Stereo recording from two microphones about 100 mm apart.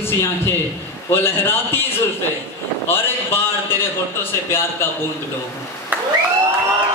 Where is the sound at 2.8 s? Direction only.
25° left (ahead or behind).